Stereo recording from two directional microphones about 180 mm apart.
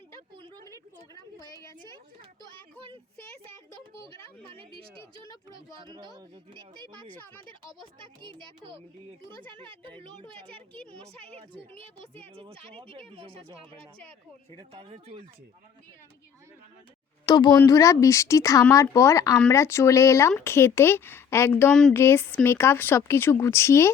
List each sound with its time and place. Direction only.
0.3 s a sound: 25° right (ahead or behind)
1.4 s speech: 20° left (ahead or behind)
5.8 s speech: 25° right (ahead or behind)
7.9 s speech: 25° right (ahead or behind)
12.1 s speech: 30° right (ahead or behind)
17.2 s speech: 25° left (ahead or behind)
21.7 s speech: centre (ahead or behind)
21.9 s speech: 15° left (ahead or behind)